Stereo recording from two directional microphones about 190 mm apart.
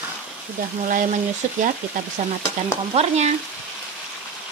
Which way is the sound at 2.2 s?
40° right (ahead or behind).